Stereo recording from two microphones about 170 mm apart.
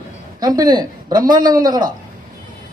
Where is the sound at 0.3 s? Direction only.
20° right (ahead or behind).